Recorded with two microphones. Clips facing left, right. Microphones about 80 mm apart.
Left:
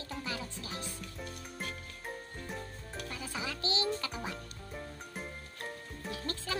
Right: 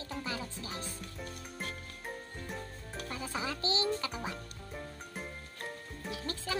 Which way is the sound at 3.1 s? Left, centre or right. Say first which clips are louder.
Right 3 dB; right.